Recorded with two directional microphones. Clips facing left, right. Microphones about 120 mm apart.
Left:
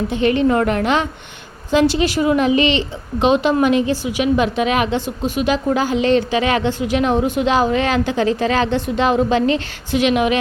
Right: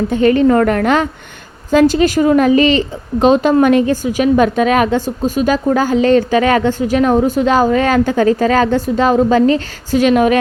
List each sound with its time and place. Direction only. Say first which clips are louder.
0.1 s a woman's voice: right 5 dB; 45° right (ahead or behind)